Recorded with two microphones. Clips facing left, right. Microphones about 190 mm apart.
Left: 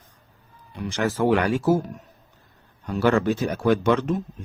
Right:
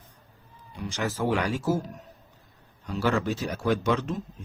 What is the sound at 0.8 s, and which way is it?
Speech, 60° left (ahead or behind).